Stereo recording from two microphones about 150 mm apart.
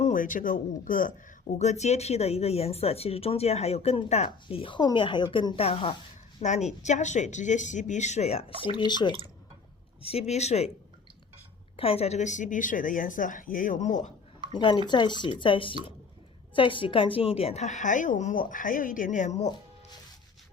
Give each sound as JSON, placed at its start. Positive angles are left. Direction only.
{"t": 0.0, "sound": "speech", "side_deg": 60}
{"t": 6.4, "sound": "speech", "side_deg": 50}
{"t": 10.0, "sound": "speech", "side_deg": 40}
{"t": 11.8, "sound": "a woman's voice", "side_deg": 40}
{"t": 14.5, "sound": "speech", "side_deg": 30}